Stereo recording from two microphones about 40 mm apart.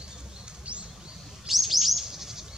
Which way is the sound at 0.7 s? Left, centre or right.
Right.